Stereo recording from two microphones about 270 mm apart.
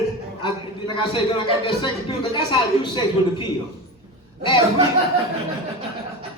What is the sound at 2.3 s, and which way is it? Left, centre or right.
A woman's voice, centre.